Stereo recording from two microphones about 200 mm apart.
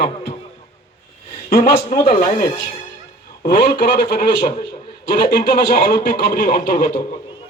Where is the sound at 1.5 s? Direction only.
45° left (ahead or behind).